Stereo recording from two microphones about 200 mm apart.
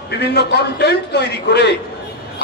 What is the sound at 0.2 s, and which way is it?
A man's voice, 55° left (ahead or behind).